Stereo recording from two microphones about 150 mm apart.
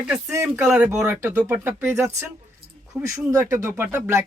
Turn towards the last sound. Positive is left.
turn(degrees=-15)  # may be behind; listen again after turning